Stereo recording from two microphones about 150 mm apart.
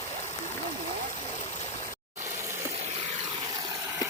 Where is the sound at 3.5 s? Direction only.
25° right (ahead or behind).